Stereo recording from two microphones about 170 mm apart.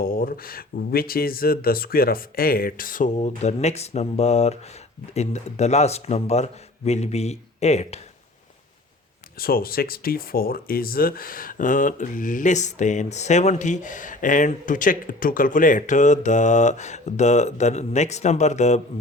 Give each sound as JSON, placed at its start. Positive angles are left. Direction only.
{"t": 0.0, "sound": "speech", "side_deg": 60}
{"t": 3.2, "sound": "speech", "side_deg": 40}
{"t": 9.4, "sound": "speech", "side_deg": 60}